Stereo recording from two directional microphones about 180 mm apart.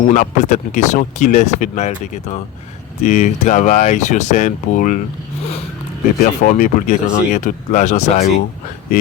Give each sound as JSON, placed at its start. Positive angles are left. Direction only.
{"t": 0.0, "sound": "speech", "side_deg": 45}
{"t": 6.1, "sound": "speech", "side_deg": 45}